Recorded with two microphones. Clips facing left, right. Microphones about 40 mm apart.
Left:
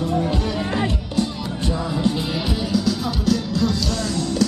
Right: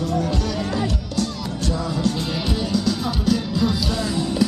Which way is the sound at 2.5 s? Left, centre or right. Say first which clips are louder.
Even; centre.